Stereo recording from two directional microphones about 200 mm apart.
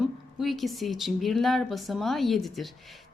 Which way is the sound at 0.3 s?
Centre (ahead or behind).